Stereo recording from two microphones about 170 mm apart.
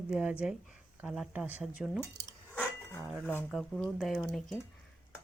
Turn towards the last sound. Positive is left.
turn(degrees=0)  # may be behind; listen again after turning